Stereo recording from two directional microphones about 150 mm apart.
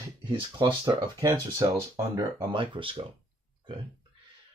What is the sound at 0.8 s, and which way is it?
Speech, 25° right (ahead or behind).